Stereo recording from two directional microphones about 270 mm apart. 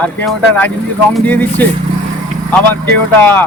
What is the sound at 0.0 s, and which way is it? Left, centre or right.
Speech, centre.